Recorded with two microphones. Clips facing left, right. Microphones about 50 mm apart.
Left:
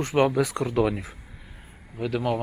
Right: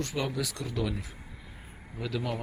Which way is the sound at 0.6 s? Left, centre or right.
Left.